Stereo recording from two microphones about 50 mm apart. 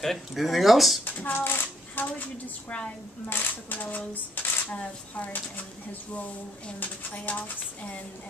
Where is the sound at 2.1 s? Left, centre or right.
Left.